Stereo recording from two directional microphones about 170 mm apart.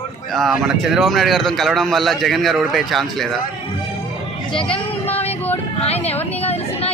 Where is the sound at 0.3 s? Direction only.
Centre (ahead or behind).